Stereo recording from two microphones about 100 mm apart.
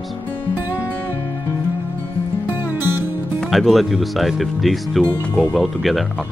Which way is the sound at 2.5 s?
20° right (ahead or behind).